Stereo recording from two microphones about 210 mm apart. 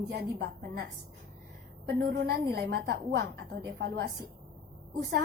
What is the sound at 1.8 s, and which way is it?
A woman's voice, 50° right (ahead or behind).